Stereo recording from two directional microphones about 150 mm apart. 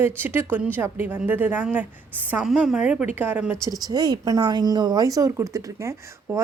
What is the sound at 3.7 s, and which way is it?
A woman's voice, 25° right (ahead or behind).